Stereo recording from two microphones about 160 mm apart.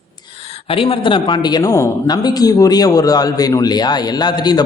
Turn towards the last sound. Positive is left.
turn(degrees=25)  # may be behind; listen again after turning